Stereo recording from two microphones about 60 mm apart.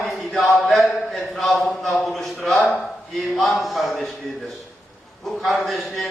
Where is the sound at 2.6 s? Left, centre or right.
Left.